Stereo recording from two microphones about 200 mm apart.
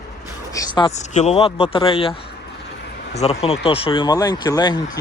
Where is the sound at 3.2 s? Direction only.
30° left (ahead or behind).